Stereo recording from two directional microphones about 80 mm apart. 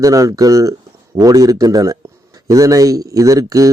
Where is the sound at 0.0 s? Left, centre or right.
Right.